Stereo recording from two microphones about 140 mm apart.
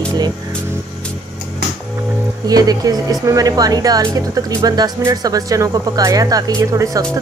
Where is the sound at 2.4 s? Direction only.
25° right (ahead or behind).